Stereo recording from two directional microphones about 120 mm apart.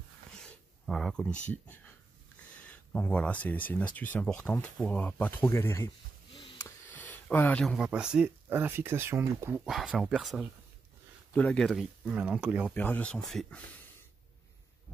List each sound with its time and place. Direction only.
0.4 s speech: 5° left (ahead or behind)
3.1 s speech: 10° left (ahead or behind)
6.6 s a sound: 15° left (ahead or behind)
7.6 s speech: 5° right (ahead or behind)
9.7 s speech: centre (ahead or behind)
11.3 s speech: 10° left (ahead or behind)
11.8 s speech: 10° right (ahead or behind)
12.7 s speech: 15° left (ahead or behind)